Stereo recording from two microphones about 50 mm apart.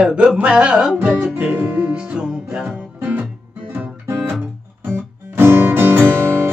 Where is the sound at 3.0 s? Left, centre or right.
Right.